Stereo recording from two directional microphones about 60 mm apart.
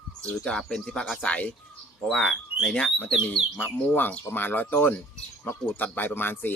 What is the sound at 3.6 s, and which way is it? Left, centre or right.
Speech, left.